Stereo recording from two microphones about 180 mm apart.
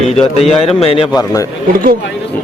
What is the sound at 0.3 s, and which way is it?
Speech, 35° left (ahead or behind).